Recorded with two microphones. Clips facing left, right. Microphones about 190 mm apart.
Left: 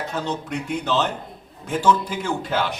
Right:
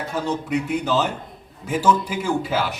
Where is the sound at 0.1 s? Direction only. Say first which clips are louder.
Right 3 dB; 10° right (ahead or behind).